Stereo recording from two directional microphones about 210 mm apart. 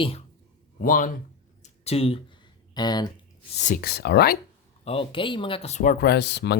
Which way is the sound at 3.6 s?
40° left (ahead or behind).